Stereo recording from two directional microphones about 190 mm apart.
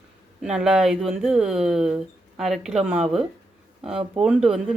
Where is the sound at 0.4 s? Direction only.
5° right (ahead or behind).